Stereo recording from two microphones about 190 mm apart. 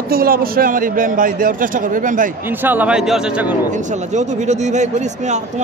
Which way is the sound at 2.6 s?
5° right (ahead or behind).